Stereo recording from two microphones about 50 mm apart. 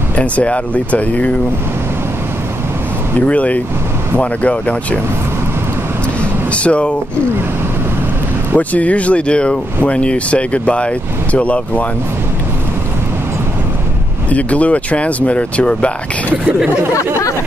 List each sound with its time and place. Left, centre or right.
0.1 s speech: left
3.2 s speech: left
6.5 s speech: left
8.5 s speech: left
14.3 s speech: left